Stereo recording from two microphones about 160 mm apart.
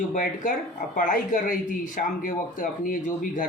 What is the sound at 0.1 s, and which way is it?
A man's voice, 55° left (ahead or behind).